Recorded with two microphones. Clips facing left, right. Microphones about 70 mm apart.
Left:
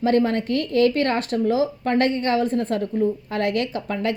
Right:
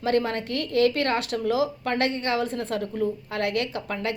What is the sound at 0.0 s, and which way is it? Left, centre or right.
Speech, left.